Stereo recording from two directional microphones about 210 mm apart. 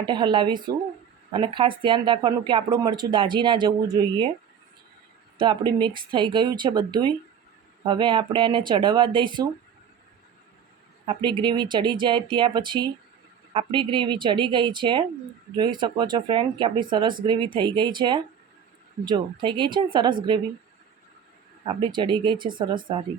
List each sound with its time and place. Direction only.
0.0 s speech: 20° right (ahead or behind)
5.4 s speech: 20° right (ahead or behind)
11.0 s speech: 25° right (ahead or behind)
21.6 s speech: 25° right (ahead or behind)